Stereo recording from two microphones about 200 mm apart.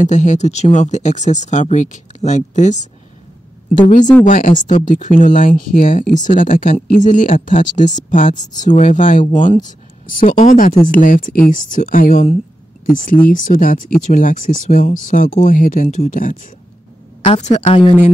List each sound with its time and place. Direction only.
0.0 s speech: 35° left (ahead or behind)
4.2 s speech: 40° left (ahead or behind)
9.2 s a woman's voice: 25° left (ahead or behind)
9.7 s a woman's voice: 40° left (ahead or behind)